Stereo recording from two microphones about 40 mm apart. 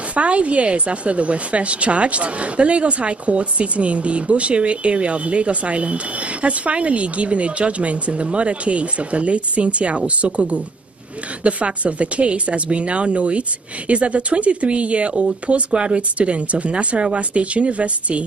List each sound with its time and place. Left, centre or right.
0.1 s a woman's voice: right